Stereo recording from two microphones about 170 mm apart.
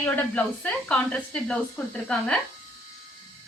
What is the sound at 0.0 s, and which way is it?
A woman's voice, 10° left (ahead or behind).